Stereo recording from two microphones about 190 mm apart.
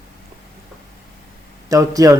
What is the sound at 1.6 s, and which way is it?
Speech, 20° right (ahead or behind).